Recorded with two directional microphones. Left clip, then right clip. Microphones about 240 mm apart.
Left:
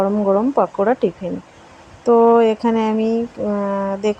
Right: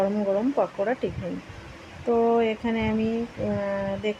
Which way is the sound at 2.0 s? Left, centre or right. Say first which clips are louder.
Left 10 dB; left.